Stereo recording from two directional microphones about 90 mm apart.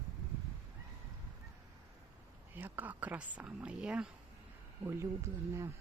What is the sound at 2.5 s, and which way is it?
Speech, 20° right (ahead or behind).